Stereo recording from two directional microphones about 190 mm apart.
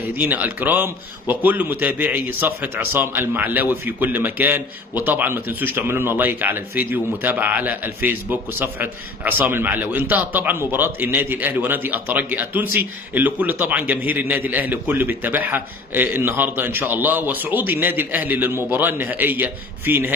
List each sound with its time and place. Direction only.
0.1 s a man's voice: 10° right (ahead or behind)